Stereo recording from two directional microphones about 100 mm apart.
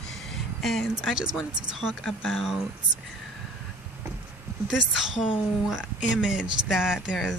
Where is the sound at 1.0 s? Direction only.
5° right (ahead or behind).